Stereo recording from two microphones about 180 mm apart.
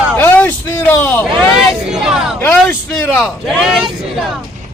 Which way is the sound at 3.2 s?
Centre (ahead or behind).